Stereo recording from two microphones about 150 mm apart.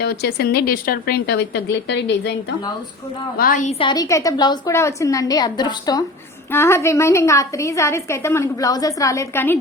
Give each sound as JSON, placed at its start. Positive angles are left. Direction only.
{"t": 0.0, "sound": "speech", "side_deg": 90}
{"t": 3.3, "sound": "a woman's voice", "side_deg": 65}
{"t": 3.8, "sound": "a woman's voice", "side_deg": 30}